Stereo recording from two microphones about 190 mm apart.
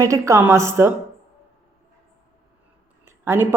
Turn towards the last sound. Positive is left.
turn(degrees=-10)  # may be behind; listen again after turning